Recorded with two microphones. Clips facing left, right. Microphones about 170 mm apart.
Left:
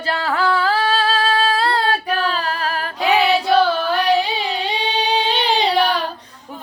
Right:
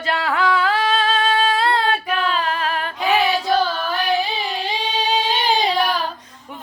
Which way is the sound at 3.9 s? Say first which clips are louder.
Left 3 dB; 70° left (ahead or behind).